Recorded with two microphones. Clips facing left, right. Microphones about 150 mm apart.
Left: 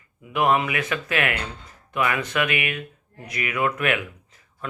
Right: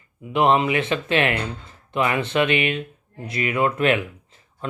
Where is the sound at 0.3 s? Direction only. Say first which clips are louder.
Right 3 dB; 25° right (ahead or behind).